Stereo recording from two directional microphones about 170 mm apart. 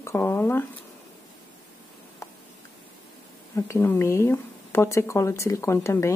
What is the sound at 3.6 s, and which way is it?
Speech, 15° left (ahead or behind).